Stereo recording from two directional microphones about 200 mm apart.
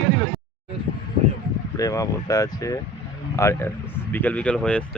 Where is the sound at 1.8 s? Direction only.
15° left (ahead or behind).